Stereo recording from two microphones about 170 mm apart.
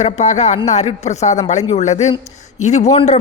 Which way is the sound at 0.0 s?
45° left (ahead or behind).